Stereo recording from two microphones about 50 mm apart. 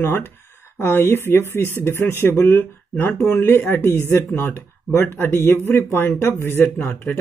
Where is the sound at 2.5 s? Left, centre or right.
Left.